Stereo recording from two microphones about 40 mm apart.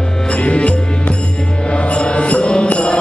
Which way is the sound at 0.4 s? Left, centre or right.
Left.